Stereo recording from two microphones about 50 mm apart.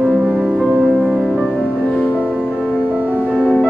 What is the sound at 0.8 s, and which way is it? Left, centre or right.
Music, centre.